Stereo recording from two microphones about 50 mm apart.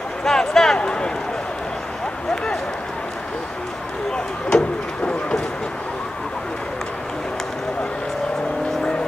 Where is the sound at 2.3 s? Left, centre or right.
Centre.